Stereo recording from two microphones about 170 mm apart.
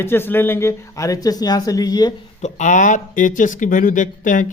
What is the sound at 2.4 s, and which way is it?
Speech, 45° left (ahead or behind).